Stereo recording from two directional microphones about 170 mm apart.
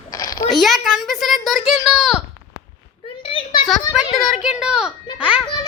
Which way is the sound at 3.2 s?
30° left (ahead or behind).